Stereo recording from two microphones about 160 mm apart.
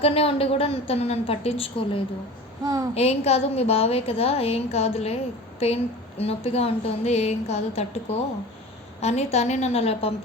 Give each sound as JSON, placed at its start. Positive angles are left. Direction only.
{"t": 0.0, "sound": "a woman's voice", "side_deg": 35}